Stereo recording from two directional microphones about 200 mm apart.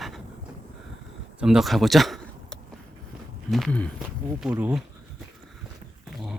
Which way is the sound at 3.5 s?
Centre (ahead or behind).